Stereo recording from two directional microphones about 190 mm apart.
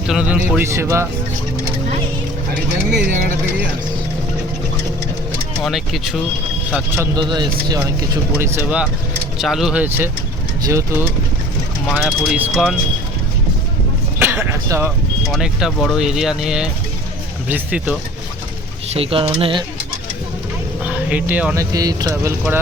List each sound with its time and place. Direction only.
0.1 s a man's voice: 5° right (ahead or behind)
5.5 s a man's voice: centre (ahead or behind); by 11.0 s 15° right (ahead or behind)
11.9 s speech: 5° right (ahead or behind)
14.2 s speech: 10° right (ahead or behind)
15.3 s a man's voice: centre (ahead or behind)
18.9 s speech: 30° right (ahead or behind)
20.8 s a man's voice: 5° right (ahead or behind)